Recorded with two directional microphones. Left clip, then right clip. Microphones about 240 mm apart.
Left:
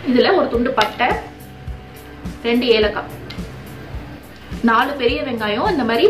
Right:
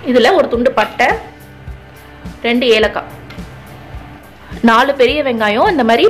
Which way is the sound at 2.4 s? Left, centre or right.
Right.